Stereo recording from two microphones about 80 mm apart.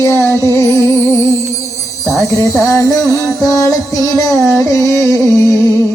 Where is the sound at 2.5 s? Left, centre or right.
Left.